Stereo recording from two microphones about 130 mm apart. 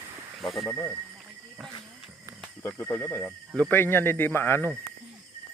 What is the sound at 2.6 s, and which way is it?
Speech, 20° left (ahead or behind).